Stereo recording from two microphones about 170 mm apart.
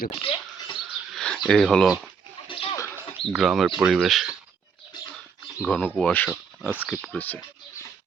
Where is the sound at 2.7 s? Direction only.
15° left (ahead or behind).